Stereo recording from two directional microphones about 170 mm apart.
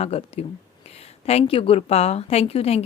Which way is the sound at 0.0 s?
35° left (ahead or behind).